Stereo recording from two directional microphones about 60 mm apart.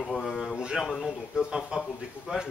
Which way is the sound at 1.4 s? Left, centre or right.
Centre.